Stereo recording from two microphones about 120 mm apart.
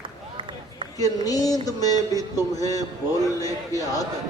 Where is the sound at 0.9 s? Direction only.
30° left (ahead or behind).